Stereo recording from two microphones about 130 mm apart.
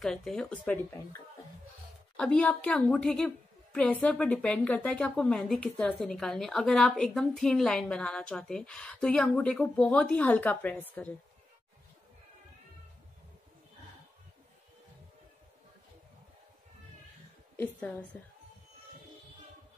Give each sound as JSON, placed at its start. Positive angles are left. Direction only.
{"t": 0.0, "sound": "speech", "side_deg": 5}
{"t": 2.1, "sound": "a woman's voice", "side_deg": 10}
{"t": 17.6, "sound": "a woman's voice", "side_deg": 15}